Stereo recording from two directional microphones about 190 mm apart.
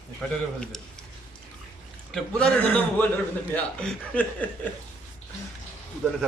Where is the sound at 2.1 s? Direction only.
5° left (ahead or behind).